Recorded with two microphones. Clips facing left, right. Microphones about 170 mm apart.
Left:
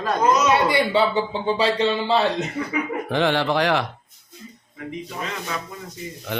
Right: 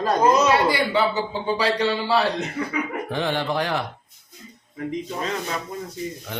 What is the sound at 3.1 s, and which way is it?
Speech, 85° left.